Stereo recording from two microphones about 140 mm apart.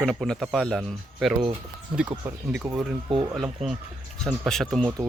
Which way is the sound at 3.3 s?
Centre (ahead or behind).